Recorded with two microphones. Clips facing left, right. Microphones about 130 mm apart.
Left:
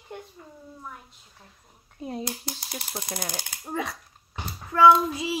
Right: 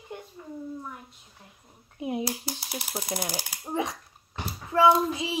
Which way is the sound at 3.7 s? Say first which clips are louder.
Right 2 dB; 20° right (ahead or behind).